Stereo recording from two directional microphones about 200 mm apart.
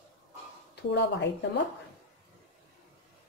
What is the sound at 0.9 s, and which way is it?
Speech, 60° left (ahead or behind).